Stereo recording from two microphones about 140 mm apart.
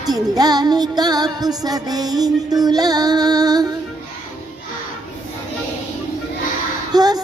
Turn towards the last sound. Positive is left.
turn(degrees=-30)  # may be behind; listen again after turning